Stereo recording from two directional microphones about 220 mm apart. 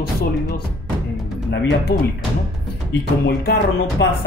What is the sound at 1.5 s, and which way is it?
Speech, 50° left (ahead or behind).